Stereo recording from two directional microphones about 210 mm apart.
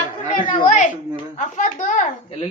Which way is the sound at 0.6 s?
35° left (ahead or behind).